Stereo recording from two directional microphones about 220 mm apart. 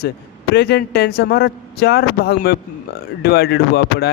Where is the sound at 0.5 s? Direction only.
45° left (ahead or behind).